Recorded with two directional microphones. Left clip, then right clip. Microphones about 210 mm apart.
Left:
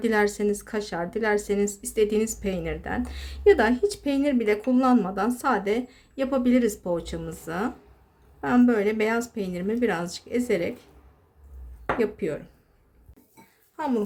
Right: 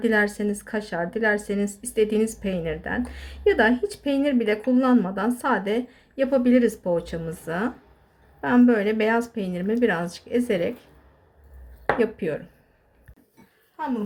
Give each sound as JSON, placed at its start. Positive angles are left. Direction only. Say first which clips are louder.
{"t": 0.0, "sound": "a woman's voice", "louder": "right 1 dB", "side_deg": 15}
{"t": 11.9, "sound": "a woman's voice", "louder": "even", "side_deg": 10}
{"t": 13.7, "sound": "speech", "louder": "left 2 dB", "side_deg": 50}